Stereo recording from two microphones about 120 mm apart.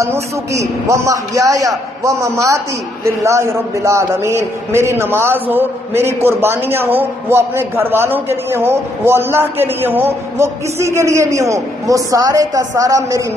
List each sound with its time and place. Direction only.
0.0 s a man's voice: 25° right (ahead or behind)